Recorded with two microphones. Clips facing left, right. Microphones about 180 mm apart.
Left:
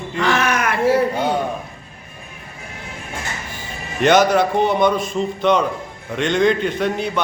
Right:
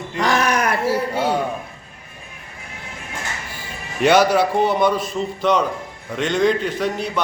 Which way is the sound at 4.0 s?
5° right (ahead or behind).